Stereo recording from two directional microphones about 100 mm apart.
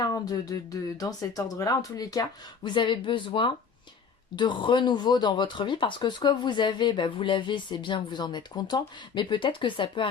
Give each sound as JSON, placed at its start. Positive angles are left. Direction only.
{"t": 0.0, "sound": "speech", "side_deg": 40}
{"t": 2.6, "sound": "speech", "side_deg": 50}